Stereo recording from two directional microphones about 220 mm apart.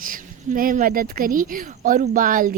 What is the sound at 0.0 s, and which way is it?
Speech, 40° right (ahead or behind).